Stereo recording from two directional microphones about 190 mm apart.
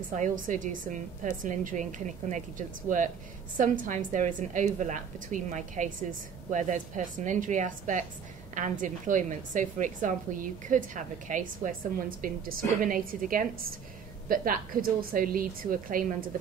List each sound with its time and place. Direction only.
0.1 s a woman's voice: 40° right (ahead or behind)